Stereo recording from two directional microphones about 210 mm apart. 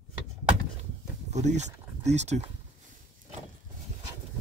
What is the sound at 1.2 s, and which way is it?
Speech, 35° right (ahead or behind).